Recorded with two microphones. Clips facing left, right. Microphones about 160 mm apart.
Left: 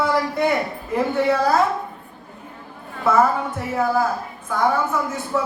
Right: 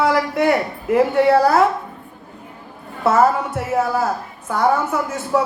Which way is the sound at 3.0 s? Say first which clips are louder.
Right 2 dB; 80° right.